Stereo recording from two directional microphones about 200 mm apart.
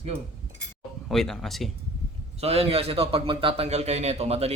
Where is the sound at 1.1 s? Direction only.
Centre (ahead or behind).